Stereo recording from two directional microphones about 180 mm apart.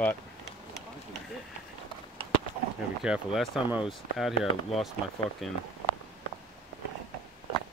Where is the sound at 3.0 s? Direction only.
5° right (ahead or behind).